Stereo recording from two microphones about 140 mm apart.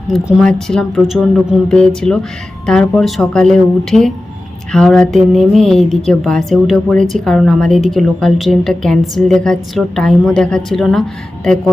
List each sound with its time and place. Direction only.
0.1 s a woman's voice: centre (ahead or behind)